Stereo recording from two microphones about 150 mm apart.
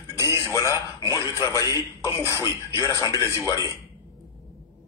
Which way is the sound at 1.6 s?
20° right (ahead or behind).